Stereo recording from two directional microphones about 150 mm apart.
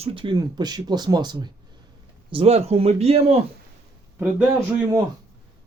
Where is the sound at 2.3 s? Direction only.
40° right (ahead or behind).